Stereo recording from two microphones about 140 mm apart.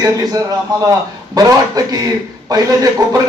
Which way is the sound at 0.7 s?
30° right (ahead or behind).